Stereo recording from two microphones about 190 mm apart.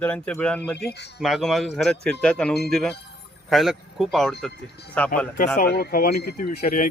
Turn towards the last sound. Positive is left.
turn(degrees=40)  # may be behind; listen again after turning